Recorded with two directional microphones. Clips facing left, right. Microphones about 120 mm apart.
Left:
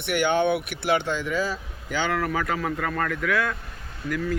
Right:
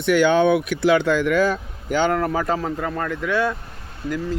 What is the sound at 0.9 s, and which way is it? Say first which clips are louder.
Speech: right 6 dB; 90° right.